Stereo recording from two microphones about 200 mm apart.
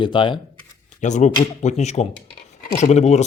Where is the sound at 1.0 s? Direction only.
35° left (ahead or behind).